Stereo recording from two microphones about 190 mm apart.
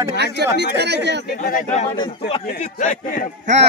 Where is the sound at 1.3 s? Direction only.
50° left (ahead or behind).